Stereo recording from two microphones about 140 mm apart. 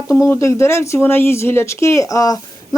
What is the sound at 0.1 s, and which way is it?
Speech, 20° left (ahead or behind).